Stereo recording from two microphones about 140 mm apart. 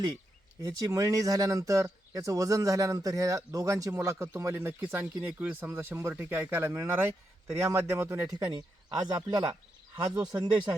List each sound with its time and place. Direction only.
0.6 s speech: 25° right (ahead or behind)
8.4 s speech: 30° right (ahead or behind)